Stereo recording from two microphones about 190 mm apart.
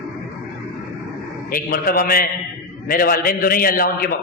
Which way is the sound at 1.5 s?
50° left (ahead or behind).